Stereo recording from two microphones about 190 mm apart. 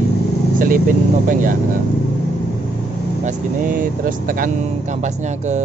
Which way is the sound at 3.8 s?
45° right (ahead or behind).